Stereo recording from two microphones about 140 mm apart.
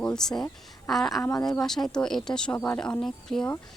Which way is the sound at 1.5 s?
5° left (ahead or behind).